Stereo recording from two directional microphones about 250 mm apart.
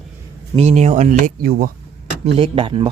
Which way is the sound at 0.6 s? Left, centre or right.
Right.